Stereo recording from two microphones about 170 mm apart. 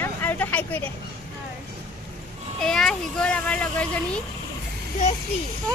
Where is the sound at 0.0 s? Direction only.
10° left (ahead or behind).